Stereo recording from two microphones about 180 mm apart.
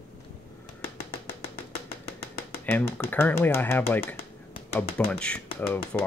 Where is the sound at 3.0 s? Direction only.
10° left (ahead or behind).